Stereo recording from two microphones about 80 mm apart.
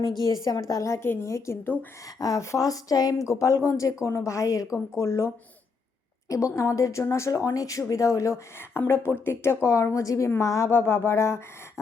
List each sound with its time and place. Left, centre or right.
0.7 s speech: left
2.1 s a woman's voice: left